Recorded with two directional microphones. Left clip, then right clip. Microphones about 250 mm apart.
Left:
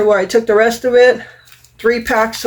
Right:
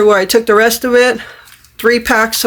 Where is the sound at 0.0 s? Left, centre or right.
Right.